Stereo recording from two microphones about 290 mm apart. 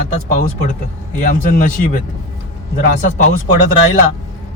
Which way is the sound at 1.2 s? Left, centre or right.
Left.